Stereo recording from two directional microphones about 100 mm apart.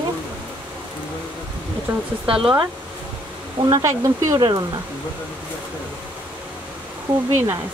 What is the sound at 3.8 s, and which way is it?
Speech, 30° right (ahead or behind).